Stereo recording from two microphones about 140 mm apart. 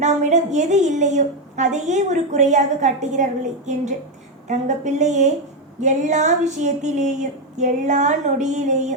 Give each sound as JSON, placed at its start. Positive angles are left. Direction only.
{"t": 0.0, "sound": "a woman's voice", "side_deg": -55}